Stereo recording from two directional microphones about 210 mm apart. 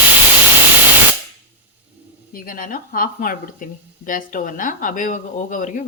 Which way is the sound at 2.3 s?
40° left (ahead or behind).